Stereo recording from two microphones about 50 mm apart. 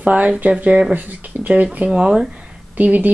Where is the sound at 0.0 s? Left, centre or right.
Right.